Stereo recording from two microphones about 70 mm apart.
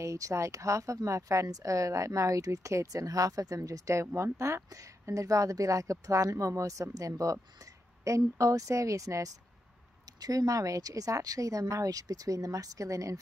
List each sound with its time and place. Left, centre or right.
0.0 s speech: right